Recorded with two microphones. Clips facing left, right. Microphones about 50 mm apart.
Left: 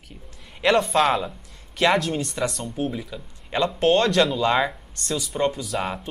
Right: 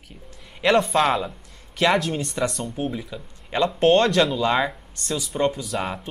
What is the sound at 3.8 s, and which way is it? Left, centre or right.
Speech, centre.